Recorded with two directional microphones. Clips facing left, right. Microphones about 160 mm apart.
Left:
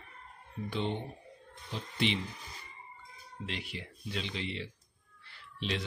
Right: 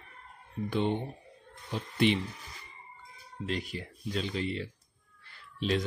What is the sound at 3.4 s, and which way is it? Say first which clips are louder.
Speech: right 7 dB; 45° right (ahead or behind).